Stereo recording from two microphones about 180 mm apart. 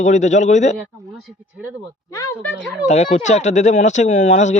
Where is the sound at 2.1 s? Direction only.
15° left (ahead or behind).